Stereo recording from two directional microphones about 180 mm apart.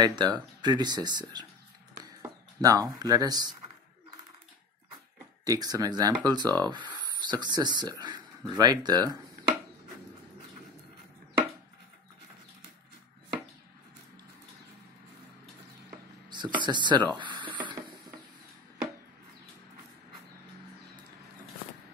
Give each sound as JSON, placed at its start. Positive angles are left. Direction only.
{"t": 0.0, "sound": "speech", "side_deg": -25}
{"t": 5.4, "sound": "speech", "side_deg": -20}
{"t": 16.3, "sound": "a sound", "side_deg": -25}